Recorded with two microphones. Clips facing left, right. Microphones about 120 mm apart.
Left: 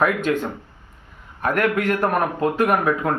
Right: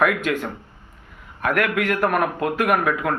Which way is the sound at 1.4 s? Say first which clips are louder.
Left 1 dB; 35° left (ahead or behind).